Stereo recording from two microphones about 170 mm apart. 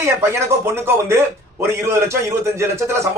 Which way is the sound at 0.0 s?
15° right (ahead or behind).